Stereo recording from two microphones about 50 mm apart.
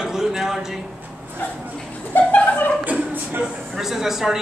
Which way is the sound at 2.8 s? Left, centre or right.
Right.